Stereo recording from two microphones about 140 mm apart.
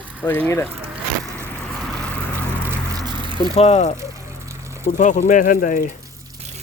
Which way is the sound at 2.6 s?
25° right (ahead or behind).